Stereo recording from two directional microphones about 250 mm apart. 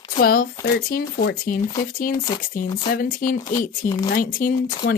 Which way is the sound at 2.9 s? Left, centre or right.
Left.